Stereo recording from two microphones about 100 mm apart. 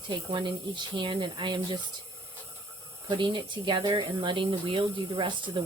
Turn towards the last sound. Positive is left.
turn(degrees=-55)  # may be behind; listen again after turning